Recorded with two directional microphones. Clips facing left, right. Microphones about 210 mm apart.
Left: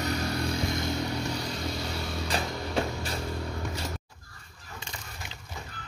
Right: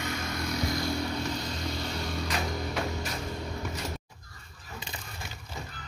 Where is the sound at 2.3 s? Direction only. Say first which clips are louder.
Left 3 dB; 30° left (ahead or behind).